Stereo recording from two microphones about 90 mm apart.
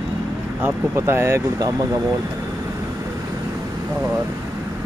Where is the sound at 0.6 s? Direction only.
25° right (ahead or behind).